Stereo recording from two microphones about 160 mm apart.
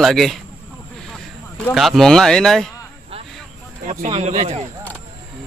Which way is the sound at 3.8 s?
45° right (ahead or behind).